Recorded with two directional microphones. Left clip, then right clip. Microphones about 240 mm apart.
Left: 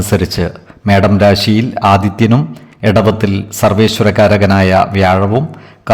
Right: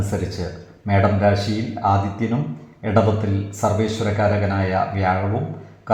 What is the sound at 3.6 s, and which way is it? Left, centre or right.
A man's voice, left.